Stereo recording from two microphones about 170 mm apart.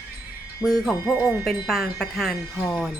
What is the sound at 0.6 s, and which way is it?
Speech, 5° left (ahead or behind).